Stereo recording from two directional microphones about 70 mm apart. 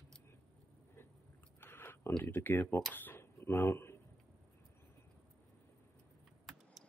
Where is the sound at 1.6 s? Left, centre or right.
Left.